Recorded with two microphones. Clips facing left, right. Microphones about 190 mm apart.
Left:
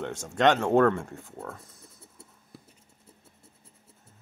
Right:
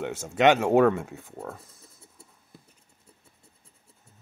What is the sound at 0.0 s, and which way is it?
Speech, 5° right (ahead or behind).